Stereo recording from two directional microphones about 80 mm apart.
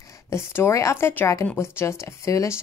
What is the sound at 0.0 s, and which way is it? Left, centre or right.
A woman's voice, left.